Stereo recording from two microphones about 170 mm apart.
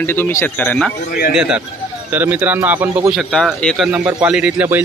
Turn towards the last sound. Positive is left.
turn(degrees=-10)  # may be behind; listen again after turning